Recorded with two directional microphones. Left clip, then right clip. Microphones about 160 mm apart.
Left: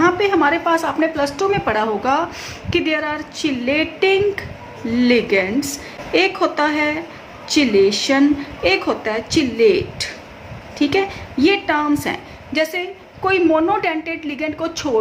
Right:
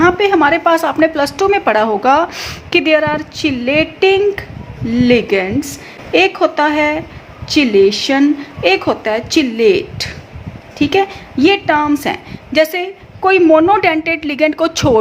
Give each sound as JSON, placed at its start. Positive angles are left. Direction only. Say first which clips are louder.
{"t": 0.0, "sound": "a woman's voice", "louder": "right 4 dB", "side_deg": -45}